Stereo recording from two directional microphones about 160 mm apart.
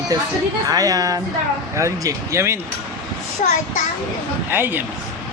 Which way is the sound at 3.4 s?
50° left (ahead or behind).